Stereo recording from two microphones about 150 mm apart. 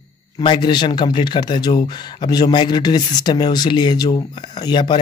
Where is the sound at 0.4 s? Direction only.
30° left (ahead or behind).